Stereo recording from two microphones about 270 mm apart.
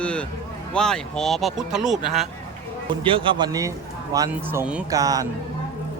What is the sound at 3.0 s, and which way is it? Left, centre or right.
A man's voice, centre.